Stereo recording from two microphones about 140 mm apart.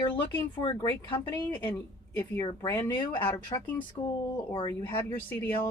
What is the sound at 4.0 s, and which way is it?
Speech, 30° left (ahead or behind).